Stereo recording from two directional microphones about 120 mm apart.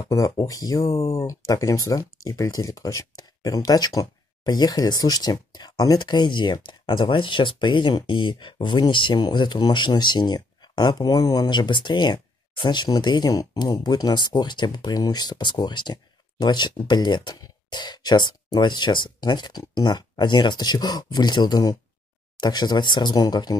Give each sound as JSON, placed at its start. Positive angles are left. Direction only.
{"t": 0.0, "sound": "speech", "side_deg": 30}